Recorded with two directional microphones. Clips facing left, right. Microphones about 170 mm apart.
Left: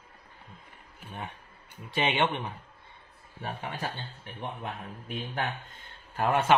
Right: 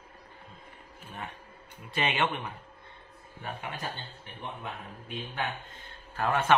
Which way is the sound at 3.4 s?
35° left (ahead or behind).